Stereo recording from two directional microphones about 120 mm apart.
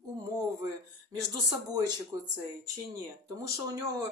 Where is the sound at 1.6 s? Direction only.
35° right (ahead or behind).